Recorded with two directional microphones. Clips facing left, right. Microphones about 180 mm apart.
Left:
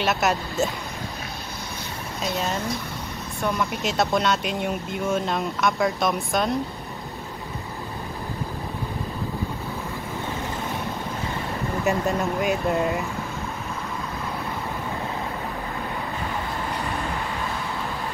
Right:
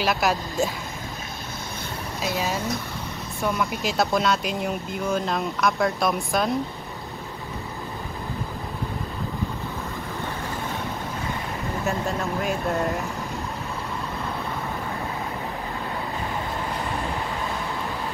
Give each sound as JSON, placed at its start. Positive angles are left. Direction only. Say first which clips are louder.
{"t": 0.0, "sound": "speech", "louder": "even", "side_deg": 0}
{"t": 2.2, "sound": "speech", "louder": "even", "side_deg": -5}
{"t": 11.8, "sound": "speech", "louder": "left 4 dB", "side_deg": 15}
{"t": 12.4, "sound": "speech", "louder": "left 2 dB", "side_deg": 0}